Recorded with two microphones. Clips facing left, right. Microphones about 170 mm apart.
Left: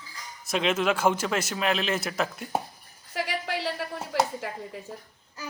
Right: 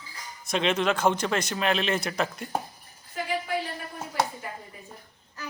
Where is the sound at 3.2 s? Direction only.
85° left.